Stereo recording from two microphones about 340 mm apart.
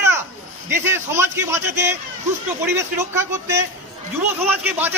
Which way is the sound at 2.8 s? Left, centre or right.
Centre.